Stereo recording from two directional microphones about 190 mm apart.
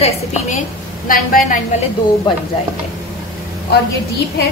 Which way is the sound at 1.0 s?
45° left (ahead or behind).